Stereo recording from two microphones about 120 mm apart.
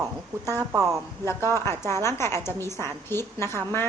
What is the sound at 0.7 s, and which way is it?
Speech, 20° right (ahead or behind).